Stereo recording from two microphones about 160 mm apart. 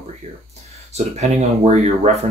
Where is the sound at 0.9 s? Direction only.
40° right (ahead or behind).